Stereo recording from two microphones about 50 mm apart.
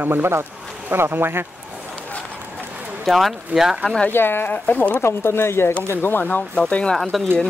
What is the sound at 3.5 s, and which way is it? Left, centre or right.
Speech, right.